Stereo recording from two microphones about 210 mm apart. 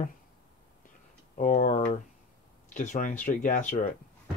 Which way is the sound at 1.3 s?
35° left (ahead or behind).